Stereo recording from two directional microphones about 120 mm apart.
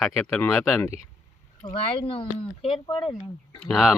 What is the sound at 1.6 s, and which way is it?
Speech, 40° left (ahead or behind).